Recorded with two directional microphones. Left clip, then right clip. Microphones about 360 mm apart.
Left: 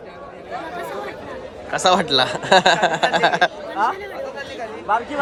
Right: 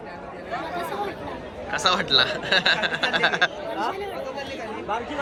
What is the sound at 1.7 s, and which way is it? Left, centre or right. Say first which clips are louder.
Speech: left 4 dB; centre.